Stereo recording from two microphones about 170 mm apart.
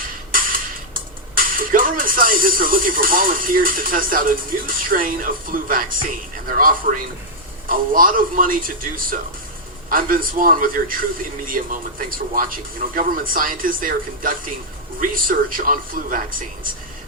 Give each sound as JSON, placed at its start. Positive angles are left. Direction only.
{"t": 0.0, "sound": "a man's voice", "side_deg": -55}